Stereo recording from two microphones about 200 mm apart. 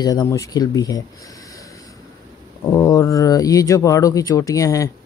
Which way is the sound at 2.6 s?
15° left (ahead or behind).